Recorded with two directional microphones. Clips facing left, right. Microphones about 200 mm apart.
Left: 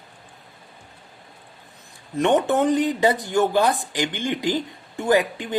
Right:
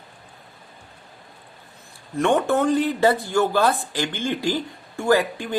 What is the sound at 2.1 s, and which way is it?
Speech, 20° left (ahead or behind).